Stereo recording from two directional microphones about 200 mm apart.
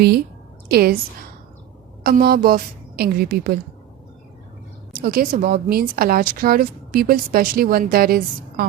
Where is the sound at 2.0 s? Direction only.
50° right (ahead or behind).